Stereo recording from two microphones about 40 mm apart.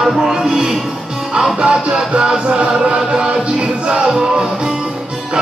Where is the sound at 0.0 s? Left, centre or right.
Centre.